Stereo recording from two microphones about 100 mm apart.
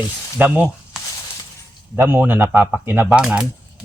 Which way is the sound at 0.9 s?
5° right (ahead or behind).